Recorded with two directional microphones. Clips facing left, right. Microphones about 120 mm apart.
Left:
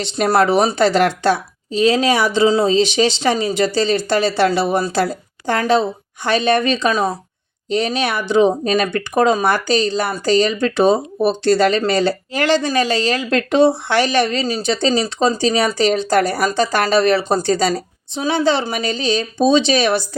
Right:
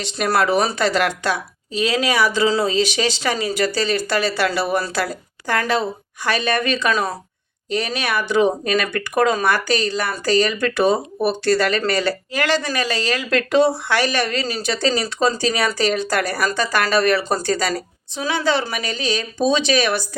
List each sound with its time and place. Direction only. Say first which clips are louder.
0.0 s speech: left 4 dB; 30° left (ahead or behind)